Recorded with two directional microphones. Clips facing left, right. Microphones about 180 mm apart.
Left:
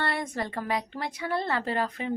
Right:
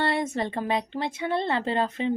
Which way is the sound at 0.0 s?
25° right (ahead or behind).